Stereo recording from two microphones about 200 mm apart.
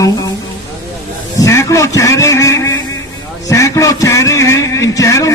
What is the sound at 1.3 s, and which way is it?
A man's voice, 15° left (ahead or behind).